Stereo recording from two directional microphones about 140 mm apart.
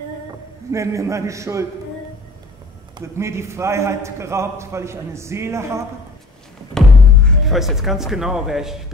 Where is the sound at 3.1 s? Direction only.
20° right (ahead or behind).